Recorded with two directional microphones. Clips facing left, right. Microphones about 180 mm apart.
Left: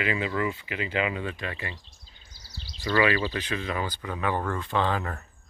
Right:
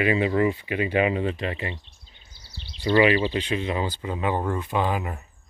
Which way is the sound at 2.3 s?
40° left (ahead or behind).